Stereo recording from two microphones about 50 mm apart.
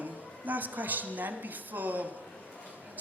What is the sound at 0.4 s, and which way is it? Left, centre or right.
A woman's voice, right.